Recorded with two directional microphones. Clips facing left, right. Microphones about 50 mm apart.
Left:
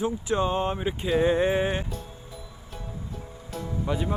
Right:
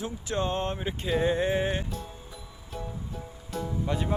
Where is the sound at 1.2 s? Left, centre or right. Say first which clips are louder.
Left 4 dB; left.